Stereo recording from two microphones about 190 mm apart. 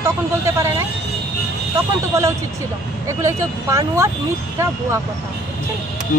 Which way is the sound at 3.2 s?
15° right (ahead or behind).